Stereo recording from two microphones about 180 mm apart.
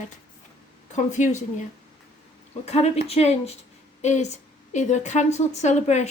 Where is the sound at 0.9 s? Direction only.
40° left (ahead or behind).